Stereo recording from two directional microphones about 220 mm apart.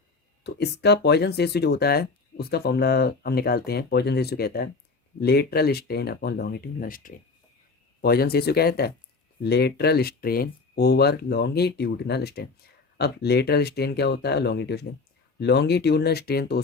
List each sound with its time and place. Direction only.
0.4 s speech: 50° left (ahead or behind)